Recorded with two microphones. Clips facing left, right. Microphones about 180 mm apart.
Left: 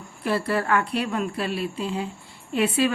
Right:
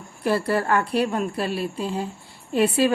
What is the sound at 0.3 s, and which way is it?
A woman's voice, 40° right (ahead or behind).